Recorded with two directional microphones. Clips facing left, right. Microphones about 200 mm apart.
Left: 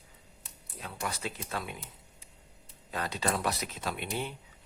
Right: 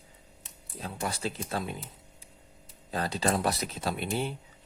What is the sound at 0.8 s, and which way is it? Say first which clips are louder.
Speech: right 4 dB; 30° right (ahead or behind).